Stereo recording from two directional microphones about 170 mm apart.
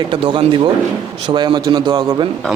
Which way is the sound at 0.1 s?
30° right (ahead or behind).